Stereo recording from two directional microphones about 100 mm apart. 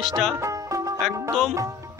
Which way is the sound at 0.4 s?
30° right (ahead or behind).